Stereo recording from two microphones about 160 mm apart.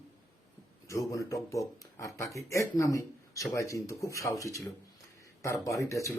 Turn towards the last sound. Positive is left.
turn(degrees=20)  # may be behind; listen again after turning